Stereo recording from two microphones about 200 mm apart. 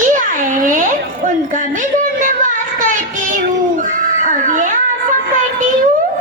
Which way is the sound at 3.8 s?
40° right (ahead or behind).